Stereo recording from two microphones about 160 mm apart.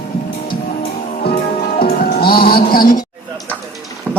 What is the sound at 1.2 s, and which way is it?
Music, 70° left (ahead or behind).